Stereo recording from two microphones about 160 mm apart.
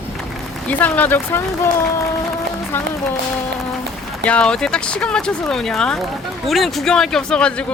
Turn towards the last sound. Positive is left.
turn(degrees=5)  # may be behind; listen again after turning